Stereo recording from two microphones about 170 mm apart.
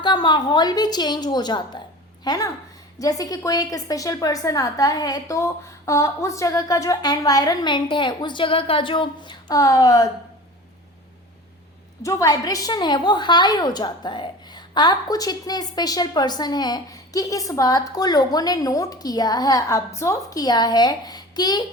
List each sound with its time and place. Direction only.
0.0 s a woman's voice: 25° left (ahead or behind)
12.0 s a woman's voice: 20° left (ahead or behind)